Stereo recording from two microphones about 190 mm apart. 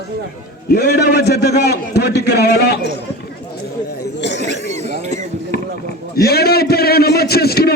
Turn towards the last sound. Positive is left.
turn(degrees=55)  # may be behind; listen again after turning